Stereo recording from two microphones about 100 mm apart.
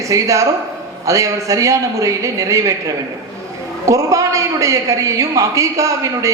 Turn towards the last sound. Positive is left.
turn(degrees=-35)  # may be behind; listen again after turning